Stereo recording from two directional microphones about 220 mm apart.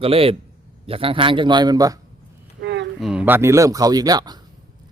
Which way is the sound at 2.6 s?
50° right (ahead or behind).